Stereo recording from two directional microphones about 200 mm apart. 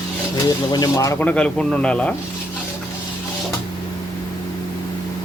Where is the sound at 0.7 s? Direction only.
15° left (ahead or behind).